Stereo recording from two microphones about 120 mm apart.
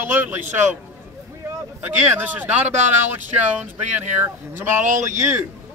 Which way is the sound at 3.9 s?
15° right (ahead or behind).